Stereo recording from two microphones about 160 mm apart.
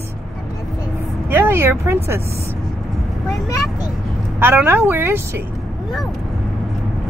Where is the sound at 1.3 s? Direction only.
15° right (ahead or behind).